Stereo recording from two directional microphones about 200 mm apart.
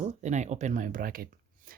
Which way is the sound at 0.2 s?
35° right (ahead or behind).